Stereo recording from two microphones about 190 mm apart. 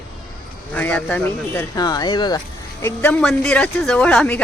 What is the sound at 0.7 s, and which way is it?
Speech, 10° left (ahead or behind).